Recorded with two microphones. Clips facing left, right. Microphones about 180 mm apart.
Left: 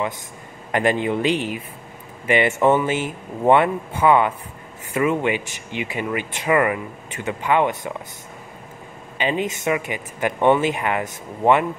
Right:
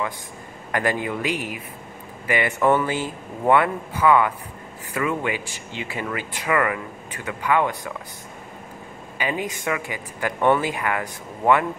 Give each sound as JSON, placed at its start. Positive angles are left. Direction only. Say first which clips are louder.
{"t": 0.7, "sound": "speech", "louder": "left 4 dB", "side_deg": 20}
{"t": 9.2, "sound": "speech", "louder": "left 4 dB", "side_deg": 25}